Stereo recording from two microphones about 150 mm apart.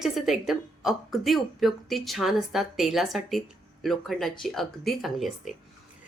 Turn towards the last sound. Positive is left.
turn(degrees=0)  # may be behind; listen again after turning